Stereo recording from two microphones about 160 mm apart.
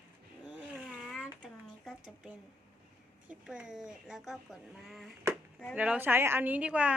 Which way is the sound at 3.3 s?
5° right (ahead or behind).